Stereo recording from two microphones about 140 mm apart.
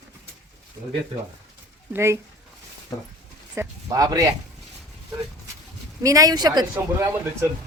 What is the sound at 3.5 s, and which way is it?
Speech, 20° right (ahead or behind).